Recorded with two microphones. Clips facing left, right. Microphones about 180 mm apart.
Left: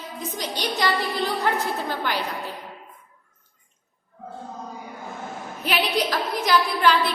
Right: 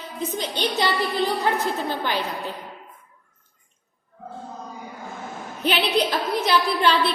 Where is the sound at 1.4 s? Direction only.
20° right (ahead or behind).